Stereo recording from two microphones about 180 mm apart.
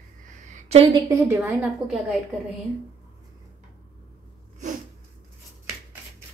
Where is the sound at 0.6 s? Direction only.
35° right (ahead or behind).